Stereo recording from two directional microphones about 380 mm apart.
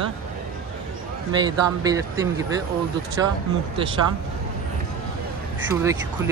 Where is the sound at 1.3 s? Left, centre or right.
Centre.